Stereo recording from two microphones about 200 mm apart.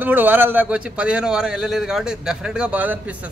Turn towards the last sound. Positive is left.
turn(degrees=-10)  # may be behind; listen again after turning